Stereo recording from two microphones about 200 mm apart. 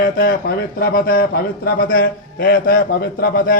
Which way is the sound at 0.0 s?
50° left (ahead or behind).